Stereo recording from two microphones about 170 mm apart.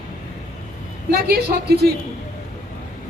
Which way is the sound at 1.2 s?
65° right (ahead or behind).